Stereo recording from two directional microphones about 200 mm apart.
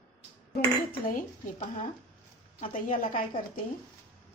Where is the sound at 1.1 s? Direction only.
40° left (ahead or behind).